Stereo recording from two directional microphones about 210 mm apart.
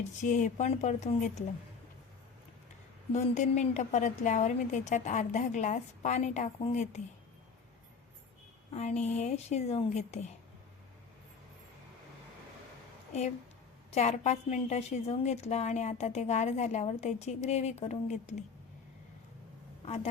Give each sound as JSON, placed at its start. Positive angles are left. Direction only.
{"t": 0.2, "sound": "a woman's voice", "side_deg": 35}
{"t": 3.1, "sound": "a woman's voice", "side_deg": 35}
{"t": 8.7, "sound": "a woman's voice", "side_deg": 30}
{"t": 13.9, "sound": "a woman's voice", "side_deg": 30}
{"t": 19.8, "sound": "speech", "side_deg": 30}